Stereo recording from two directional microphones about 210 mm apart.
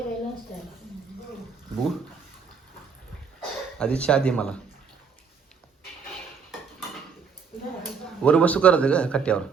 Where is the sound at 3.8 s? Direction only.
5° left (ahead or behind).